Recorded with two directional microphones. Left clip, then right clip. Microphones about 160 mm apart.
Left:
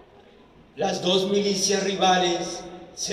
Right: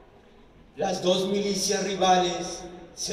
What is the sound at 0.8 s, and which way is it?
A man's voice, 20° right (ahead or behind).